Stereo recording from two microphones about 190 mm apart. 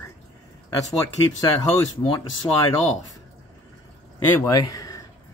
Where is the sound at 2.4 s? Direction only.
15° left (ahead or behind).